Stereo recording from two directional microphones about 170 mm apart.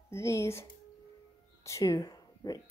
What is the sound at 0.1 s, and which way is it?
Speech, 15° left (ahead or behind).